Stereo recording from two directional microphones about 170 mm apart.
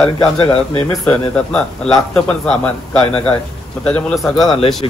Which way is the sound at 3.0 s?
35° left (ahead or behind).